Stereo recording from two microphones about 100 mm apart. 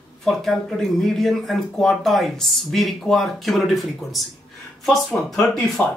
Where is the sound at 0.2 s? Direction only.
5° left (ahead or behind).